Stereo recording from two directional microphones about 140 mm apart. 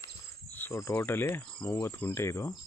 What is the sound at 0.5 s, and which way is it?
Speech, 15° left (ahead or behind).